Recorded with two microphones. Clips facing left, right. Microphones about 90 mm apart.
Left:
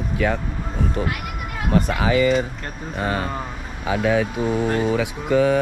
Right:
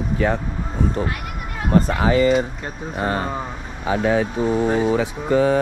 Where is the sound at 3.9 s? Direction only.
35° right (ahead or behind).